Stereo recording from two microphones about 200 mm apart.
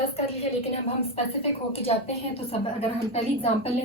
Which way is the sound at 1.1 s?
30° left (ahead or behind).